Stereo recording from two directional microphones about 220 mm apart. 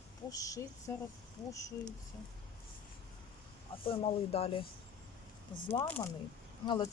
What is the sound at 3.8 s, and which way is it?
Speech, 25° left (ahead or behind).